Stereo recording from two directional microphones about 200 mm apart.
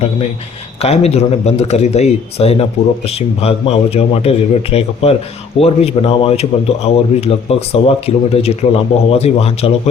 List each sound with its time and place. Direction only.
0.8 s a man's voice: 30° left (ahead or behind)